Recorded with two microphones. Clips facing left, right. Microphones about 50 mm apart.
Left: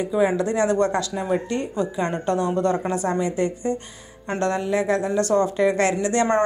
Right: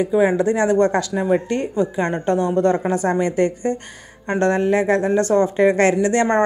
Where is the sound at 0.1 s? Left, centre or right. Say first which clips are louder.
Right 2 dB; right.